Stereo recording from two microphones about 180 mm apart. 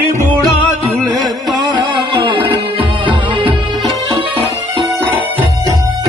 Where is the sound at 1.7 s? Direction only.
25° right (ahead or behind).